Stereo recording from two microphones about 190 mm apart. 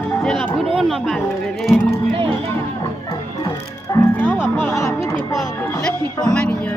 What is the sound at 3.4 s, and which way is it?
Music, 20° left (ahead or behind).